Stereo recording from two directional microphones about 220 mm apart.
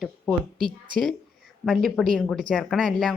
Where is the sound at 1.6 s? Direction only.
Centre (ahead or behind).